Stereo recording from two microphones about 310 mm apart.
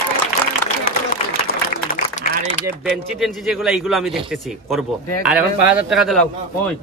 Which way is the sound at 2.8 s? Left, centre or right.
Centre.